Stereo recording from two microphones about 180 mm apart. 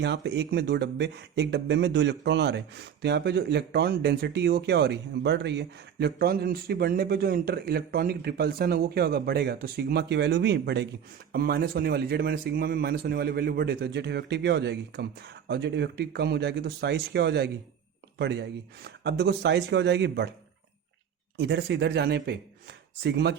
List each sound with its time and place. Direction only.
0.0 s speech: 70° right (ahead or behind)
11.3 s speech: 60° right (ahead or behind)
21.3 s speech: 70° right (ahead or behind)